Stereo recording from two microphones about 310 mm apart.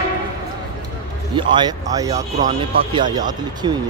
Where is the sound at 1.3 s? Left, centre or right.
Centre.